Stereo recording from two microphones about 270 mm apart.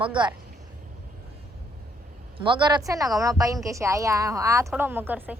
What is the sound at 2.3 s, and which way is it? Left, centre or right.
A woman's voice, centre.